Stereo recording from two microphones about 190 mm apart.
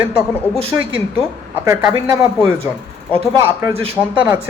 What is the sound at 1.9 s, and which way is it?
Speech, 20° right (ahead or behind).